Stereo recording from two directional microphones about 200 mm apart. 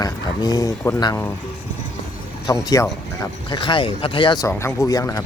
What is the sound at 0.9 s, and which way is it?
Speech, 15° left (ahead or behind).